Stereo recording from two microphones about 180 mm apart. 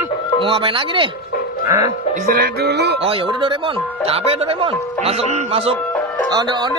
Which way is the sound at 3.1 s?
25° right (ahead or behind).